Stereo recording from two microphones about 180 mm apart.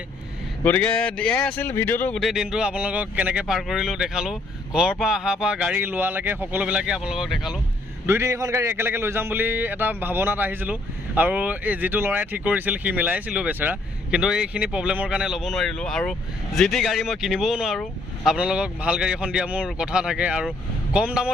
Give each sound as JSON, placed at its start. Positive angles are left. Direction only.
{"t": 0.6, "sound": "speech", "side_deg": 10}
{"t": 8.0, "sound": "a man's voice", "side_deg": -15}